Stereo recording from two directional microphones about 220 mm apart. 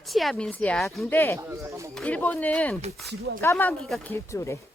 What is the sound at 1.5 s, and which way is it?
Speech, 15° right (ahead or behind).